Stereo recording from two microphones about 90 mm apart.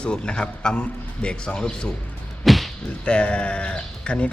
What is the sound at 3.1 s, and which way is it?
Speech, 10° left (ahead or behind).